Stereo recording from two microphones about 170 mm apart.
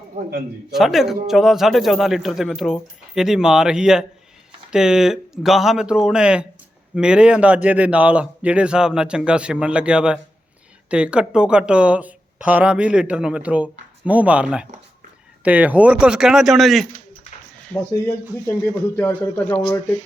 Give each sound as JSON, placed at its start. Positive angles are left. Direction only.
{"t": 0.7, "sound": "speech", "side_deg": 0}
{"t": 18.4, "sound": "a man's voice", "side_deg": 15}